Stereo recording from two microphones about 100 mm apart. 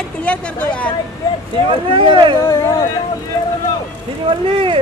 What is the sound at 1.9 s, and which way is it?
Speech, 55° right (ahead or behind).